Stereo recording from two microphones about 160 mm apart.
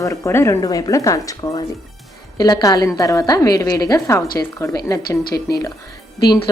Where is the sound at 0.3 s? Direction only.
15° left (ahead or behind).